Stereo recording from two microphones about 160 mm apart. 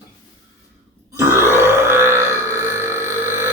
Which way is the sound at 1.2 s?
15° right (ahead or behind).